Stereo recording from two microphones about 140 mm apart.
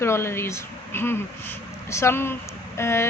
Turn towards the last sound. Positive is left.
turn(degrees=20)  # may be behind; listen again after turning